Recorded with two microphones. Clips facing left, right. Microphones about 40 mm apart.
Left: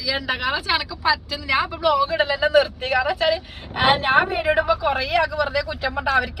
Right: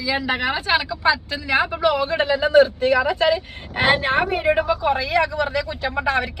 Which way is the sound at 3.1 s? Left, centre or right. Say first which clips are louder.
Right 2 dB; centre.